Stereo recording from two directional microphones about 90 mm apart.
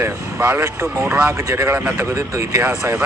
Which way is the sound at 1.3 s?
30° right (ahead or behind).